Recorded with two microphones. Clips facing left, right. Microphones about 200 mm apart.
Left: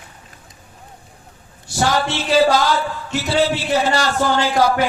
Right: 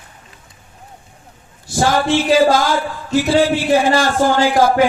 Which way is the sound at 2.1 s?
15° right (ahead or behind).